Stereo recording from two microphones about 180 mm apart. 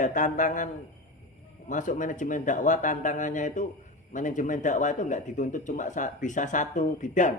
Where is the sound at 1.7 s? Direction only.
45° left (ahead or behind).